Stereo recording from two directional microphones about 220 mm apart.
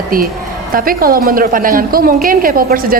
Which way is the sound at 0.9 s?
40° right (ahead or behind).